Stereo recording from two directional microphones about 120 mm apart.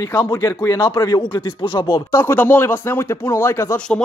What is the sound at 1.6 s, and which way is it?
Speech, 45° left (ahead or behind).